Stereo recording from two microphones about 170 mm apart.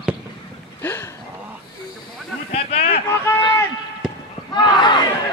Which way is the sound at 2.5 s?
35° left (ahead or behind).